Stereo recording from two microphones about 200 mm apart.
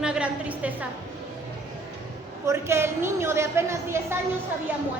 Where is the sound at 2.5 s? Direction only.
15° right (ahead or behind).